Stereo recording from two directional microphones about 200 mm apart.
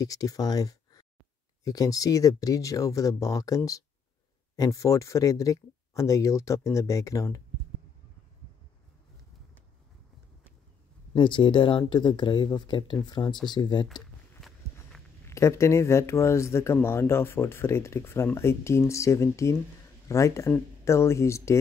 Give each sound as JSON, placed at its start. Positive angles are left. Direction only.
{"t": 0.0, "sound": "speech", "side_deg": 15}
{"t": 11.1, "sound": "speech", "side_deg": 25}
{"t": 15.2, "sound": "speech", "side_deg": 15}